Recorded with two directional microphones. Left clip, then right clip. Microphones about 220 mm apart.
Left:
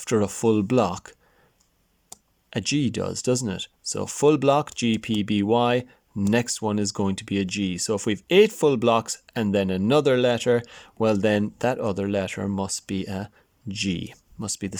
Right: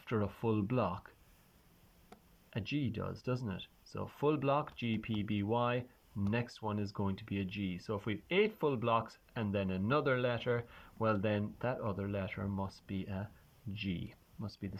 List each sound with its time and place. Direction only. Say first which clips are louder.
0.0 s speech: left 15 dB; 30° left (ahead or behind)
2.5 s speech: left 14 dB; 30° left (ahead or behind)